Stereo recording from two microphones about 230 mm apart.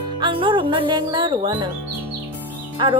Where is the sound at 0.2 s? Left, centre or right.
Right.